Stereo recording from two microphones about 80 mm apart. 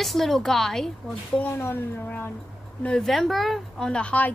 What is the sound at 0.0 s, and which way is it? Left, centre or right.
A woman's voice, centre.